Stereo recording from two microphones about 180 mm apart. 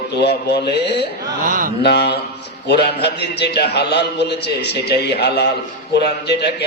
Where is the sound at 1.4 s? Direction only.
45° right (ahead or behind).